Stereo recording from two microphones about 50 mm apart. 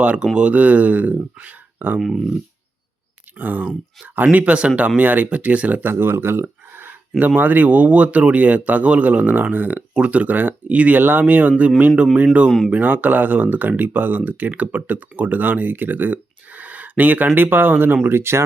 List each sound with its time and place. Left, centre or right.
0.0 s speech: right
2.0 s speech: centre
3.3 s speech: right
5.8 s speech: right
7.2 s speech: right
9.9 s speech: right
12.5 s speech: centre
12.7 s speech: right